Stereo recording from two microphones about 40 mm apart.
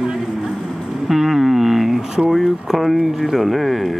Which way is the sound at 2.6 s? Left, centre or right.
Centre.